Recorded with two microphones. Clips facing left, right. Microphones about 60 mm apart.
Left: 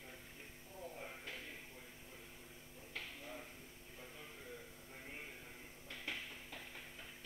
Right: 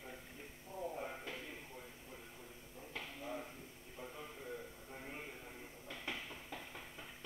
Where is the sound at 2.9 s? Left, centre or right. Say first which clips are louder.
Right 4 dB; centre.